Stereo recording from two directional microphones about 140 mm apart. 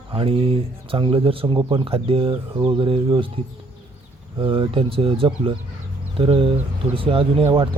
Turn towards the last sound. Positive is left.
turn(degrees=-40)  # may be behind; listen again after turning